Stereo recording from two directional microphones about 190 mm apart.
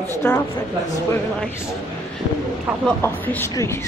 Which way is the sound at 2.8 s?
10° left (ahead or behind).